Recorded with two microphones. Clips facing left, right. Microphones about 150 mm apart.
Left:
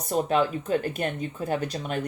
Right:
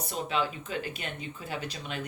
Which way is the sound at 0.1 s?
45° left (ahead or behind).